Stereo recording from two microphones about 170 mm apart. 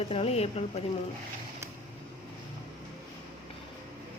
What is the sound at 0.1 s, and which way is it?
Speech, 35° left (ahead or behind).